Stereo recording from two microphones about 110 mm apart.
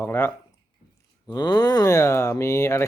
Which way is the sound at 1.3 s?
40° left (ahead or behind).